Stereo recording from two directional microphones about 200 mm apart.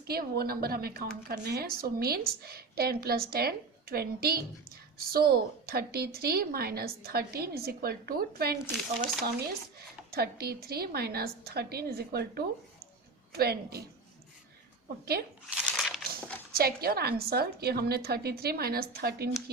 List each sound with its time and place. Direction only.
0.1 s speech: 50° right (ahead or behind)
15.4 s crumpling: centre (ahead or behind)
16.5 s speech: 50° right (ahead or behind)